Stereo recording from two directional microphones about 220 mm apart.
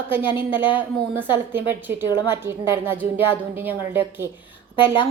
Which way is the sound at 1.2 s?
10° right (ahead or behind).